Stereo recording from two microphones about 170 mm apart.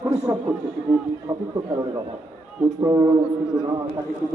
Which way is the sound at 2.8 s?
20° right (ahead or behind).